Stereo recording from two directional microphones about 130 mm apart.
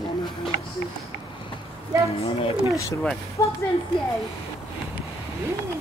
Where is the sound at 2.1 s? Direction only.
50° left (ahead or behind).